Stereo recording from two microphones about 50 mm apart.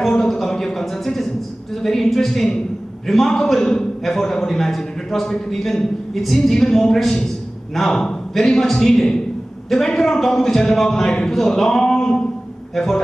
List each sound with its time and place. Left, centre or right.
0.1 s a man's voice: centre